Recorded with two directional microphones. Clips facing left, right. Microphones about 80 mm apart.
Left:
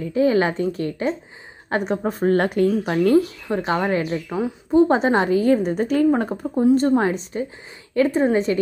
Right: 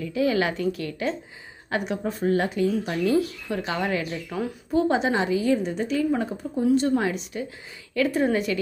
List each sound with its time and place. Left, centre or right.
0.0 s a woman's voice: left
1.7 s a woman's voice: left
3.4 s a woman's voice: left
4.9 s a woman's voice: left
6.6 s a woman's voice: left